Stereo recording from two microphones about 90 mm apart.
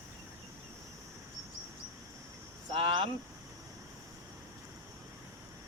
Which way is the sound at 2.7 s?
75° right (ahead or behind).